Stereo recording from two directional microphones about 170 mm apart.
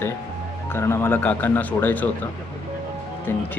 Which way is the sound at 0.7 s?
15° left (ahead or behind).